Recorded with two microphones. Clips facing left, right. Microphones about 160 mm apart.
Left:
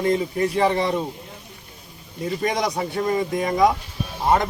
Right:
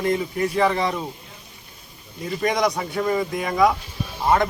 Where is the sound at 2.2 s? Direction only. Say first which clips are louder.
Right 2 dB; 30° left (ahead or behind).